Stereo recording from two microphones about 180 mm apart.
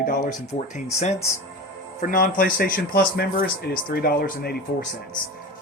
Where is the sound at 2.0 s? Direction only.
50° left (ahead or behind).